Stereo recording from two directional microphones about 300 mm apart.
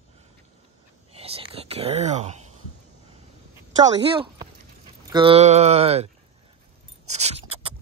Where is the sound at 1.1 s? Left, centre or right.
Centre.